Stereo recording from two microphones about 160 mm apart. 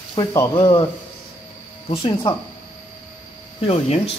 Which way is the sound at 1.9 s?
25° left (ahead or behind).